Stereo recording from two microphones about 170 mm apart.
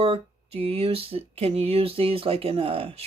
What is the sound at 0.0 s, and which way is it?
Speech, 35° right (ahead or behind).